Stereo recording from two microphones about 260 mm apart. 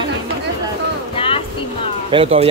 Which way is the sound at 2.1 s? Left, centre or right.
Right.